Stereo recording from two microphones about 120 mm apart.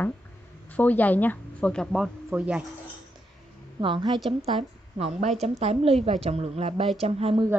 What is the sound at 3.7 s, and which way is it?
Speech, 45° right (ahead or behind).